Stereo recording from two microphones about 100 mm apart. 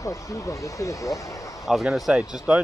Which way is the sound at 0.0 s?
30° left (ahead or behind).